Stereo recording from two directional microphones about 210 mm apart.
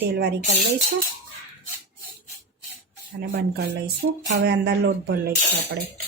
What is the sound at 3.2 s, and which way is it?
Speech, 50° right (ahead or behind).